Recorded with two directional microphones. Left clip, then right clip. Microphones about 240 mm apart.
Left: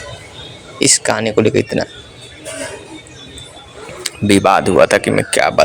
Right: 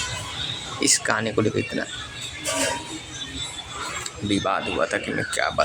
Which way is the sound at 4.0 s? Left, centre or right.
Left.